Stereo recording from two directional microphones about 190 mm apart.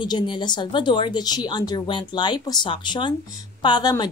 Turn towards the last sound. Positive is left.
turn(degrees=20)  # may be behind; listen again after turning